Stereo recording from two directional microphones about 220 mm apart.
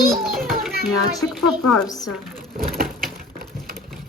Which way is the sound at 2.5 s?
40° right (ahead or behind).